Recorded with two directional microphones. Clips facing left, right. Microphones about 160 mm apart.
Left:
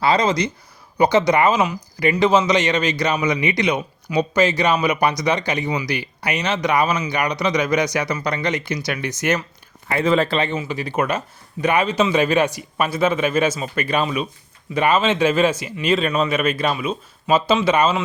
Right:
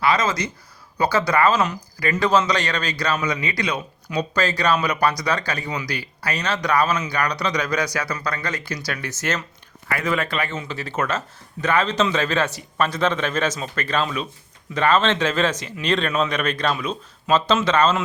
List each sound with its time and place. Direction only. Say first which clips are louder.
0.0 s a man's voice: left 3 dB; 25° left (ahead or behind)
9.9 s speech: left 6 dB; 25° left (ahead or behind)
10.6 s a man's voice: left 4 dB; 15° left (ahead or behind)